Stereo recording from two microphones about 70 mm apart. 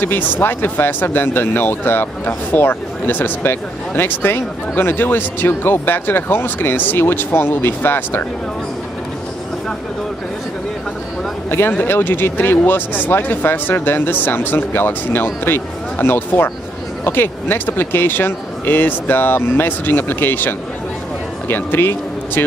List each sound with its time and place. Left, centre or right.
0.0 s speech: left
11.5 s speech: left